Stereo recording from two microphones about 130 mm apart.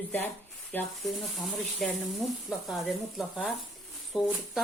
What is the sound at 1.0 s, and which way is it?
Speech, centre (ahead or behind).